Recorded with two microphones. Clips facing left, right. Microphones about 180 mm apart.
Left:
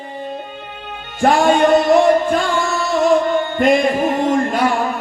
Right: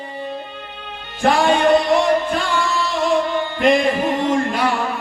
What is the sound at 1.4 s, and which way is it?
Singing, 45° left (ahead or behind).